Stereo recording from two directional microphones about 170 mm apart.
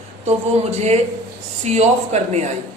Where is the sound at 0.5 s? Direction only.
40° right (ahead or behind).